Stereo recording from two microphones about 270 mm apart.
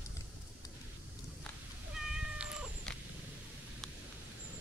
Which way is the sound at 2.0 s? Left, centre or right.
Centre.